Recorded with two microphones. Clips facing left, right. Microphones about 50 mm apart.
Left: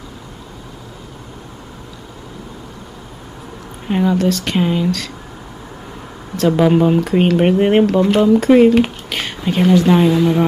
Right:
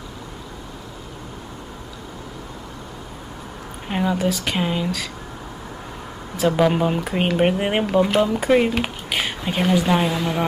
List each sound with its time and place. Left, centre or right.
3.8 s speech: centre
6.3 s speech: centre